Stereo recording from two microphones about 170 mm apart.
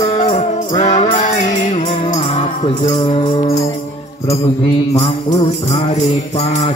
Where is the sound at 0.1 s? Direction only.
30° left (ahead or behind).